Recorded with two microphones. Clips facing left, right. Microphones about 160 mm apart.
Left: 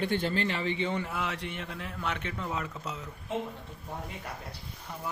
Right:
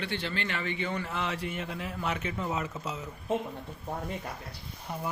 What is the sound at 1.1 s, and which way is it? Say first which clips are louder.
A man's voice: right 1 dB; 5° left (ahead or behind).